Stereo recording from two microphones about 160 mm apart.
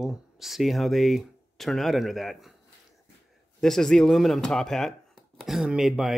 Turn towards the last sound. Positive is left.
turn(degrees=0)  # may be behind; listen again after turning